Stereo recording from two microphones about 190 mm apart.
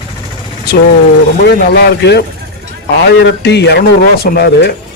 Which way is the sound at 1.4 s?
60° left (ahead or behind).